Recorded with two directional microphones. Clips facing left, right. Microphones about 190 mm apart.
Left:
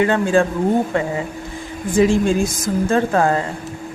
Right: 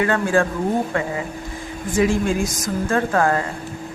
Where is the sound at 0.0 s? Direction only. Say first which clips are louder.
Left 3 dB; 25° left (ahead or behind).